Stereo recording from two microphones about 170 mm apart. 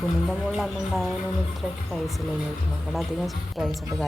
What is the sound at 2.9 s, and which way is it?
Speech, centre (ahead or behind).